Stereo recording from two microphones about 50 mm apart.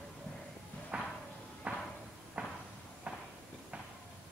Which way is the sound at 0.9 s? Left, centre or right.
Right.